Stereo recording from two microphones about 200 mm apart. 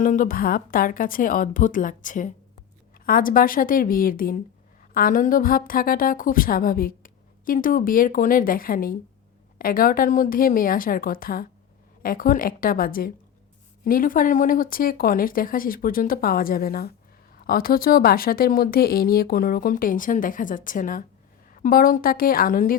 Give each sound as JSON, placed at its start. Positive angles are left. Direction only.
{"t": 0.0, "sound": "a woman's voice", "side_deg": 40}